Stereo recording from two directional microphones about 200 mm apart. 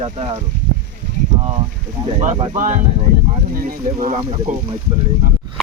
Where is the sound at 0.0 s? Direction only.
30° right (ahead or behind).